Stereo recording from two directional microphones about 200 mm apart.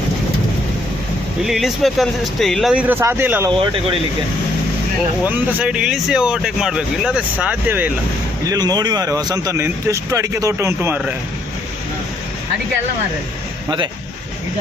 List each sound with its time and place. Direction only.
1.4 s speech: centre (ahead or behind)
3.5 s speech: 25° right (ahead or behind)
5.2 s speech: 5° right (ahead or behind)
8.4 s speech: 20° right (ahead or behind)
13.7 s speech: 20° right (ahead or behind)